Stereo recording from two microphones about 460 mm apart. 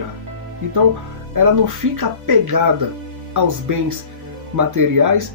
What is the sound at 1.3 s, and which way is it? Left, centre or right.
Speech, right.